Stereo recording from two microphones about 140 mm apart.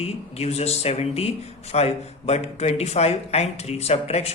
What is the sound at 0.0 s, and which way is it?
Speech, 50° left (ahead or behind).